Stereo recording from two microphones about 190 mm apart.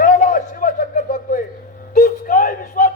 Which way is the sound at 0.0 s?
45° left (ahead or behind).